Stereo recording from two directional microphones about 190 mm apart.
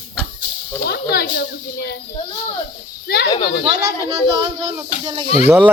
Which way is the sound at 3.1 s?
60° left (ahead or behind).